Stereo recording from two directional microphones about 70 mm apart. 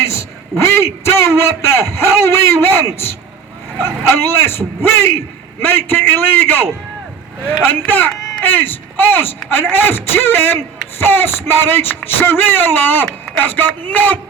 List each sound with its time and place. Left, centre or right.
0.5 s a man's voice: left